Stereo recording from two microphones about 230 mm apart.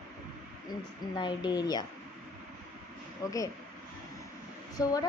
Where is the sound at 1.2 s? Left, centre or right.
Centre.